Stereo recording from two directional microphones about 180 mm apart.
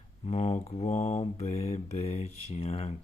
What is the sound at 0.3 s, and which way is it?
Speech, 40° left (ahead or behind).